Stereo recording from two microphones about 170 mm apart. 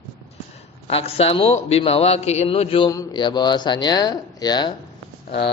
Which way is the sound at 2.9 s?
25° left (ahead or behind).